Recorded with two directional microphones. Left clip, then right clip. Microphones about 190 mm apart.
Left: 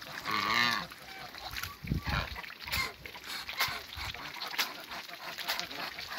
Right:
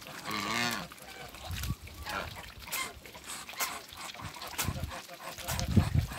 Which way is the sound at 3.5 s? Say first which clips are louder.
Left 3 dB; 45° right (ahead or behind).